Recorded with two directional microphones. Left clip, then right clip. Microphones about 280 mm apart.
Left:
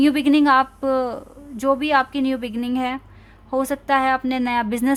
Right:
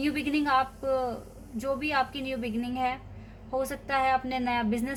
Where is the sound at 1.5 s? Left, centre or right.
Left.